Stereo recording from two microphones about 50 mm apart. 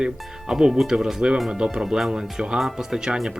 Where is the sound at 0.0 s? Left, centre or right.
Centre.